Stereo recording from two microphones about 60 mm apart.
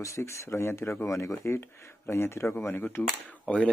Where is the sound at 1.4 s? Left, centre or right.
Left.